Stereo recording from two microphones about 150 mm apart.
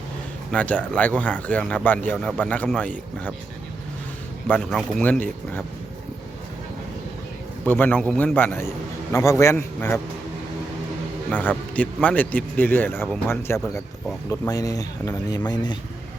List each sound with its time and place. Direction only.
0.5 s a man's voice: 10° left (ahead or behind)
4.4 s a man's voice: 5° left (ahead or behind)
7.6 s a man's voice: 10° left (ahead or behind)
11.3 s a man's voice: 10° left (ahead or behind); by 15.8 s 30° left (ahead or behind)